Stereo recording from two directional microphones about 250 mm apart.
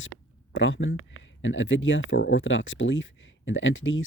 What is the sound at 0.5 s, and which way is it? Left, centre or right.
Speech, left.